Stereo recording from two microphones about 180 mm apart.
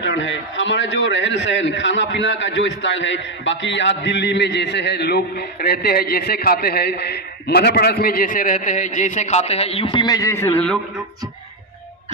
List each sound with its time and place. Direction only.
0.0 s a man's voice: 85° left; by 10.8 s 10° left (ahead or behind)